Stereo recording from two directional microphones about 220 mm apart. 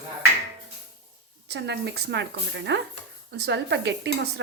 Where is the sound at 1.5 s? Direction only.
50° right (ahead or behind).